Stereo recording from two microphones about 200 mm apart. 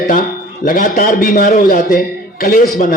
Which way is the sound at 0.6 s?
45° left (ahead or behind).